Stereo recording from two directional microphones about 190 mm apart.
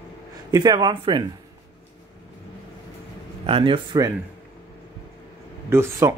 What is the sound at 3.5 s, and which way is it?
Speech, 25° right (ahead or behind).